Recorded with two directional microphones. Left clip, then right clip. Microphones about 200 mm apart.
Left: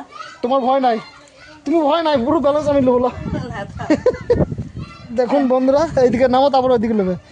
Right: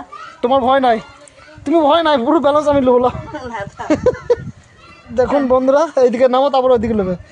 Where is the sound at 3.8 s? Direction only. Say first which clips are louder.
Right 1 dB; 10° left (ahead or behind).